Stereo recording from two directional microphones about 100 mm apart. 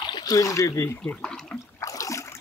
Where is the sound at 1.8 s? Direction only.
35° left (ahead or behind).